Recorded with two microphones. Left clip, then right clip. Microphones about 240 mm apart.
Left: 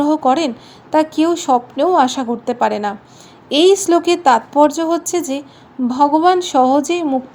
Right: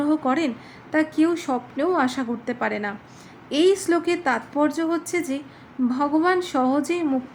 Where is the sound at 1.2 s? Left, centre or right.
Centre.